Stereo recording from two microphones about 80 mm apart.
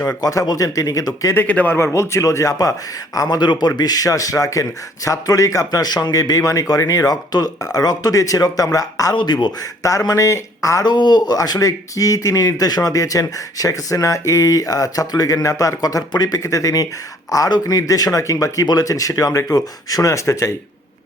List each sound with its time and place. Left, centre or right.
0.2 s speech: left
1.4 s a man's voice: left
1.9 s speech: left
3.2 s speech: left
3.8 s speech: left
9.1 s speech: left
9.8 s speech: left
10.8 s speech: left